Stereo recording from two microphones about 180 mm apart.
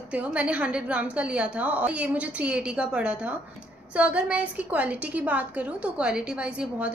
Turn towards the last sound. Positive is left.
turn(degrees=-5)  # may be behind; listen again after turning